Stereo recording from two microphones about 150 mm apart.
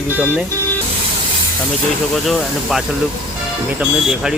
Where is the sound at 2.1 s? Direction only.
Centre (ahead or behind).